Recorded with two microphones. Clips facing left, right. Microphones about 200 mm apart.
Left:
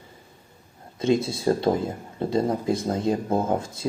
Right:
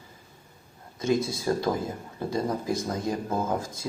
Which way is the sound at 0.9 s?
25° left (ahead or behind).